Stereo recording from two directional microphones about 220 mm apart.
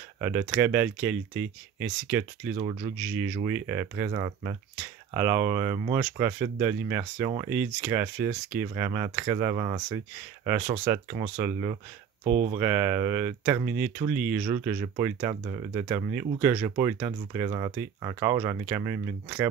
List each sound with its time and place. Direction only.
0.2 s speech: 10° right (ahead or behind)
2.5 s speech: 25° right (ahead or behind)
3.0 s speech: 10° right (ahead or behind)
10.9 s speech: 10° right (ahead or behind)
12.3 s speech: 35° right (ahead or behind)
12.5 s speech: 10° right (ahead or behind)